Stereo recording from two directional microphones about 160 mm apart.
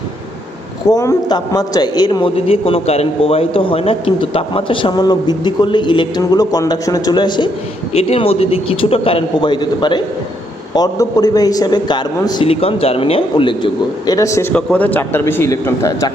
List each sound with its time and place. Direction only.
0.9 s a man's voice: 25° left (ahead or behind)
14.1 s a man's voice: 20° left (ahead or behind)
14.5 s a man's voice: 10° left (ahead or behind)